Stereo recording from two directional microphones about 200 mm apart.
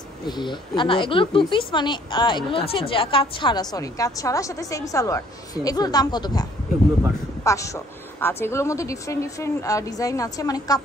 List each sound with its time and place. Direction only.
0.3 s speech: 25° left (ahead or behind)
7.4 s a woman's voice: 15° left (ahead or behind)